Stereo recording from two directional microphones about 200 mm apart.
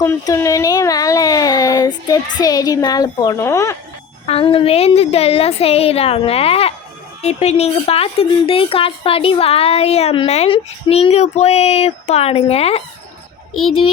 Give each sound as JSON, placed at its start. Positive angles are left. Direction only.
{"t": 0.0, "sound": "a woman's voice", "side_deg": 15}
{"t": 4.3, "sound": "a woman's voice", "side_deg": 30}